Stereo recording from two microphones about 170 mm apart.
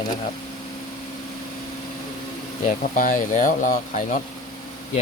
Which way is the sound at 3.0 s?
50° left (ahead or behind).